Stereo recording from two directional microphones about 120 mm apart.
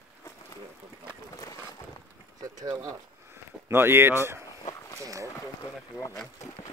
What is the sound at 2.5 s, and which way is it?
Speech, 30° right (ahead or behind).